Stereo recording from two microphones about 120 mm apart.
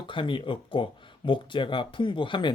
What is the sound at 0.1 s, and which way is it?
Speech, 45° left (ahead or behind).